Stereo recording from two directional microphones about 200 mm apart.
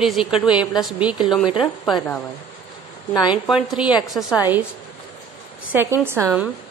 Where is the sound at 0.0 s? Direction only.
Centre (ahead or behind).